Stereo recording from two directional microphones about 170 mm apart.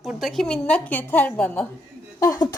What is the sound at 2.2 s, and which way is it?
Speech, 20° left (ahead or behind).